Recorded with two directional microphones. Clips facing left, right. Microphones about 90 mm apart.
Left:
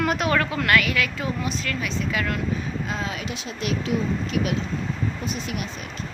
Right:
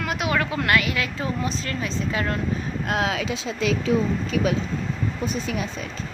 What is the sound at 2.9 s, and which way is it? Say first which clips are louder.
Speech: right 10 dB; 85° right.